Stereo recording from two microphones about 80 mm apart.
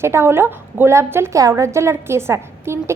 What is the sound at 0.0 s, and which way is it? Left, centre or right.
A woman's voice, right.